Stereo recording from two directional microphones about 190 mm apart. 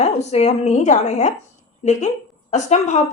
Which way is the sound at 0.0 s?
35° left (ahead or behind).